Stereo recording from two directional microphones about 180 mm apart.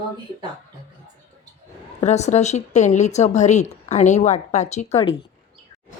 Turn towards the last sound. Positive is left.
turn(degrees=35)  # may be behind; listen again after turning